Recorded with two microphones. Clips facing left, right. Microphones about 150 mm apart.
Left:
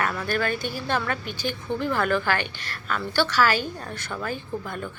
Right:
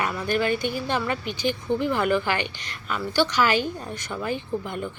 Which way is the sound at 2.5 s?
50° left (ahead or behind).